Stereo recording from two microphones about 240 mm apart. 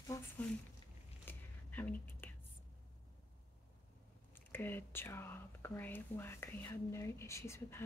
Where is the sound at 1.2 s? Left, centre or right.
Centre.